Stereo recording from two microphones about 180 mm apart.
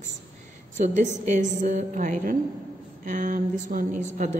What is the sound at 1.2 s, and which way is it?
A woman's voice, 45° right (ahead or behind).